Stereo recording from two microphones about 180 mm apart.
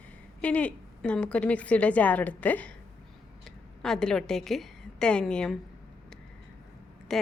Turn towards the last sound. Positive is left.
turn(degrees=0)  # may be behind; listen again after turning